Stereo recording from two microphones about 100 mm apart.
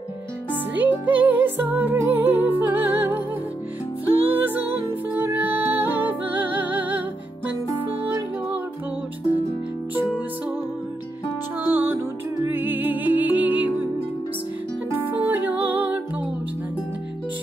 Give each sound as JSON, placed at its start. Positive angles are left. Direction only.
{"t": 0.5, "sound": "music", "side_deg": -20}
{"t": 4.2, "sound": "music", "side_deg": -20}
{"t": 11.6, "sound": "music", "side_deg": -20}
{"t": 15.0, "sound": "music", "side_deg": -20}